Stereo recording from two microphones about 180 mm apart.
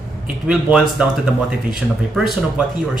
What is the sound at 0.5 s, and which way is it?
Speech, 5° right (ahead or behind).